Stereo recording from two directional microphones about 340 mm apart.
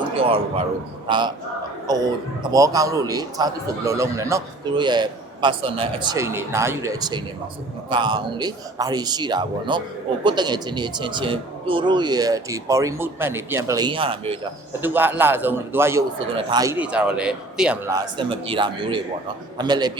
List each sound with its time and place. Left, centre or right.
1.0 s a man's voice: centre